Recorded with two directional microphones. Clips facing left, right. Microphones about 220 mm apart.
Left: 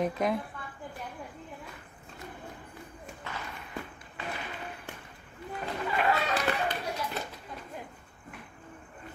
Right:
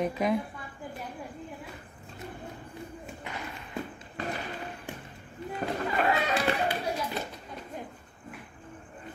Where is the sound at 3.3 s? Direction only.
15° right (ahead or behind).